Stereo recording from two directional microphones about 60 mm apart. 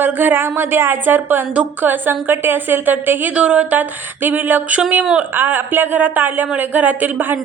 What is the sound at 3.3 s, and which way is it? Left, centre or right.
A woman's voice, centre.